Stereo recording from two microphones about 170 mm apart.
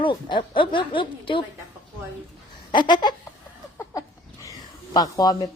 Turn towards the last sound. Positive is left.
turn(degrees=20)  # may be behind; listen again after turning